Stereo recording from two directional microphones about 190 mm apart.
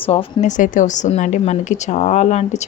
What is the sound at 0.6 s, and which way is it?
A woman's voice, 40° left (ahead or behind).